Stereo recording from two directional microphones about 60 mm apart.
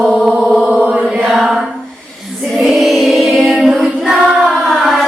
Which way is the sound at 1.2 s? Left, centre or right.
Centre.